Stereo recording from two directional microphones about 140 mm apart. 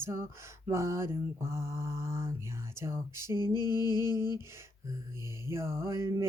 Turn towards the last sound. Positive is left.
turn(degrees=-20)  # may be behind; listen again after turning